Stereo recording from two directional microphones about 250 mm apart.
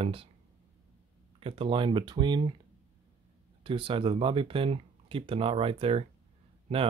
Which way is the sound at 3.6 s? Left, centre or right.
Right.